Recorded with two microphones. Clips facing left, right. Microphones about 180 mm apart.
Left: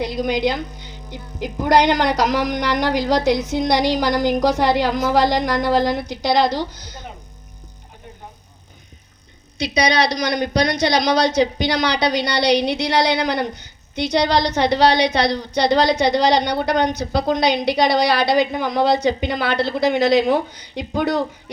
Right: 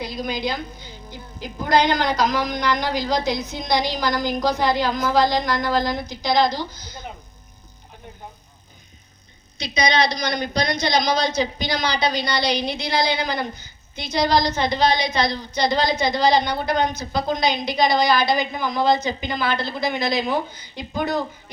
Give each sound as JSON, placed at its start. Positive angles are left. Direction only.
{"t": 0.0, "sound": "a woman's voice", "side_deg": 75}
{"t": 10.0, "sound": "a woman's voice", "side_deg": 80}